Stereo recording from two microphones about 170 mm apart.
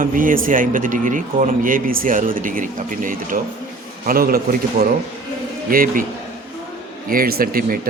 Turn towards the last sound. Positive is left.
turn(degrees=-60)  # may be behind; listen again after turning